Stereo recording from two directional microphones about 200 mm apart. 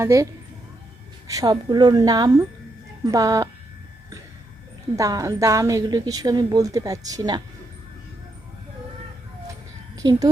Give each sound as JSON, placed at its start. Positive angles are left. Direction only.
{"t": 0.0, "sound": "a woman's voice", "side_deg": -15}
{"t": 1.3, "sound": "a woman's voice", "side_deg": -20}
{"t": 4.9, "sound": "a woman's voice", "side_deg": -15}
{"t": 10.0, "sound": "a woman's voice", "side_deg": -20}